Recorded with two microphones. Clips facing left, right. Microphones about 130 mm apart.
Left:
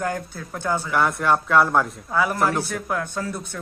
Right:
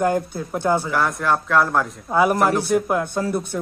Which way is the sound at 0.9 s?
Centre (ahead or behind).